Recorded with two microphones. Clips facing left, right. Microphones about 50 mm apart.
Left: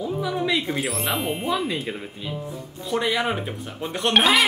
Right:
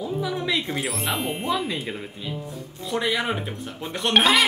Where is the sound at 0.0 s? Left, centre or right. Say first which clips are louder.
Left 2 dB; centre.